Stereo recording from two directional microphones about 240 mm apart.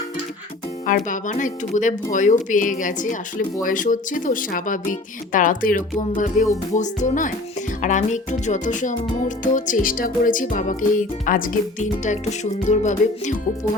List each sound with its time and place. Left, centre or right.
0.9 s speech: left
12.6 s music: left